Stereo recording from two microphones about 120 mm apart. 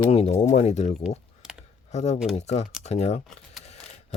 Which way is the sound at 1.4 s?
5° right (ahead or behind).